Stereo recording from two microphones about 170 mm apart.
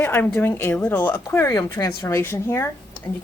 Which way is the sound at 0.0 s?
10° left (ahead or behind).